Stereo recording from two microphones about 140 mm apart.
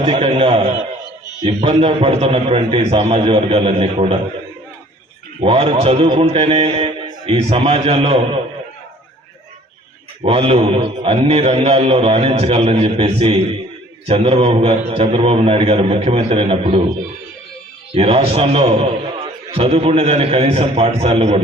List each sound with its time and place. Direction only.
0.0 s a sound: 40° right (ahead or behind)
1.5 s a man's voice: 40° right (ahead or behind)
5.4 s a man's voice: 40° right (ahead or behind)
10.2 s a man's voice: 40° right (ahead or behind)
17.9 s a man's voice: 45° right (ahead or behind)